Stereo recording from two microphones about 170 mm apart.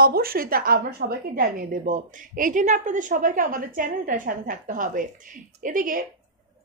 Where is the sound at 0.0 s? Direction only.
60° right (ahead or behind).